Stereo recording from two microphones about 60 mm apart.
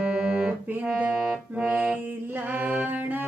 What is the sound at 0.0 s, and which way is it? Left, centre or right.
Music, centre.